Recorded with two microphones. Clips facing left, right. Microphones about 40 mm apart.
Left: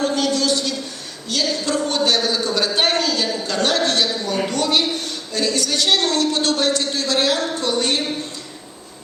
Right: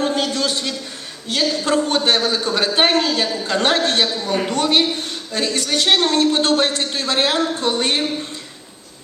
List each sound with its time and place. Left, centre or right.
0.0 s a woman's voice: right